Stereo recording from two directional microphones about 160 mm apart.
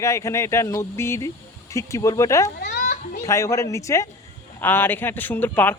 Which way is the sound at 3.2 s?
20° left (ahead or behind).